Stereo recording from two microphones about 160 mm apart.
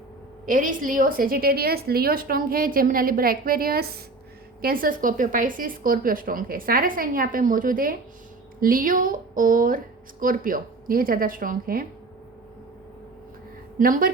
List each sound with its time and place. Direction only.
0.4 s a woman's voice: 55° right (ahead or behind)
13.7 s a woman's voice: 60° right (ahead or behind)